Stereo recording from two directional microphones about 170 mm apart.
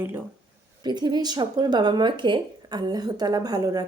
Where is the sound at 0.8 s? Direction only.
25° right (ahead or behind).